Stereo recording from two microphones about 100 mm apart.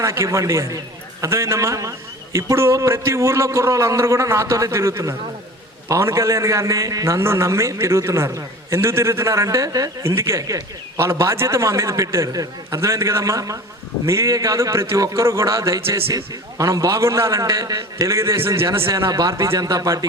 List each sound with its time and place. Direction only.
0.0 s a man's voice: 30° right (ahead or behind)